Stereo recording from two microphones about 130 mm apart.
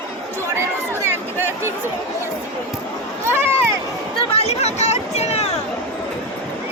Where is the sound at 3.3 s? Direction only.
20° right (ahead or behind).